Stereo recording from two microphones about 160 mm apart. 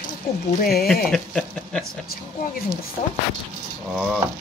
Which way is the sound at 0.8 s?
Centre (ahead or behind).